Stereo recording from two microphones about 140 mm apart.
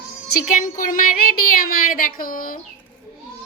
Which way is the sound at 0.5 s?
75° left (ahead or behind).